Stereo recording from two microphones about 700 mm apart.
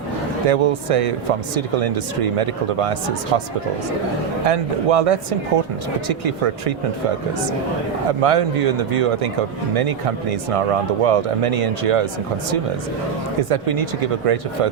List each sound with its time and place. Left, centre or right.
0.4 s speech: right
4.4 s speech: right
8.2 s speech: right
13.5 s speech: right